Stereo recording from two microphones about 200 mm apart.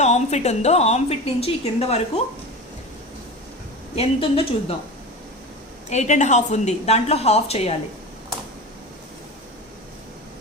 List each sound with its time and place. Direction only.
0.0 s a woman's voice: 35° left (ahead or behind)
3.9 s a woman's voice: 30° left (ahead or behind)
5.9 s a woman's voice: 35° left (ahead or behind)